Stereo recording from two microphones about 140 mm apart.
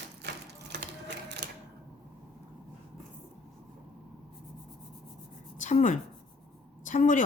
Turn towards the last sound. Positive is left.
turn(degrees=65)  # may be behind; listen again after turning